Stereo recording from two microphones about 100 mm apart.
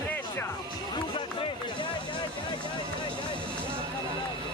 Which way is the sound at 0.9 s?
55° left (ahead or behind).